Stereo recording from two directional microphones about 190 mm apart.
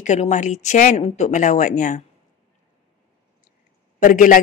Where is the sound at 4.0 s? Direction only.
45° left (ahead or behind).